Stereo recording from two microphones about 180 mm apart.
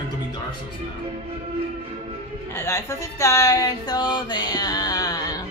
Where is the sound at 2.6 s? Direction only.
15° left (ahead or behind).